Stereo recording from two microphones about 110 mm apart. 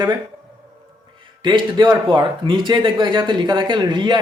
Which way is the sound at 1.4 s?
45° right (ahead or behind).